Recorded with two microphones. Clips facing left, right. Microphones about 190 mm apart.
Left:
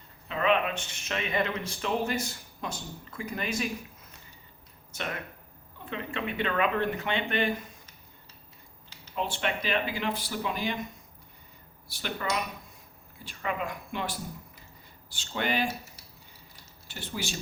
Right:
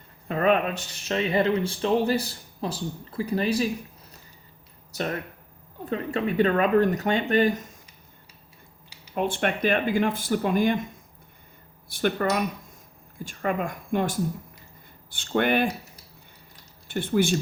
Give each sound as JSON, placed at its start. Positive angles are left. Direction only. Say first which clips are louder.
{"t": 0.3, "sound": "speech", "louder": "right 4 dB", "side_deg": -45}
{"t": 4.9, "sound": "speech", "louder": "right 7 dB", "side_deg": -40}
{"t": 9.1, "sound": "speech", "louder": "right 6 dB", "side_deg": -50}
{"t": 11.9, "sound": "speech", "louder": "right 9 dB", "side_deg": -50}
{"t": 16.9, "sound": "speech", "louder": "right 13 dB", "side_deg": -55}